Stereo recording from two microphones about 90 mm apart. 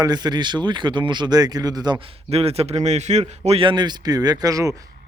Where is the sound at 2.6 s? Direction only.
90° right.